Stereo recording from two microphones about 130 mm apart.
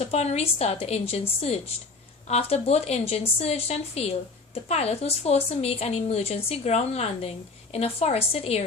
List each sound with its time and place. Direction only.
0.0 s a woman's voice: 50° left (ahead or behind)